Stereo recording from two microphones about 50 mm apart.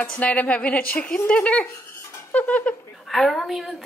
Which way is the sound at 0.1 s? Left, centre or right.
Left.